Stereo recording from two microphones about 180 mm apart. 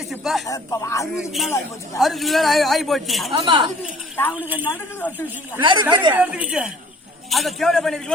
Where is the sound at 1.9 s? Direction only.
Centre (ahead or behind).